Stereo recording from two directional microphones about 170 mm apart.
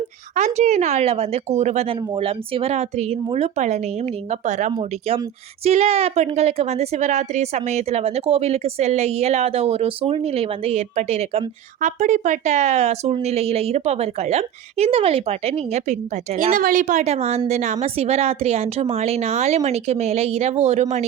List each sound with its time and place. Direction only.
0.3 s a woman's voice: 40° right (ahead or behind)